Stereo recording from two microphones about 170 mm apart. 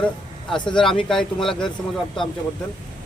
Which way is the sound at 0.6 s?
25° left (ahead or behind).